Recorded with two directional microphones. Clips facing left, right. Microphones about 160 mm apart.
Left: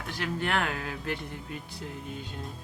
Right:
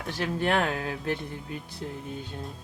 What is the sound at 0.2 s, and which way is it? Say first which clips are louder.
Speech: right 4 dB; 30° right (ahead or behind).